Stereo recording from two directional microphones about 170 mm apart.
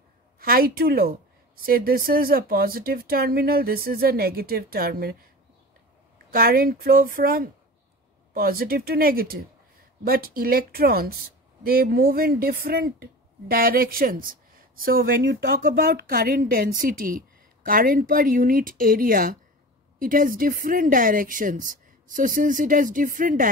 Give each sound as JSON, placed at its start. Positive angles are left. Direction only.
{"t": 0.4, "sound": "a woman's voice", "side_deg": -60}
{"t": 6.3, "sound": "a woman's voice", "side_deg": -60}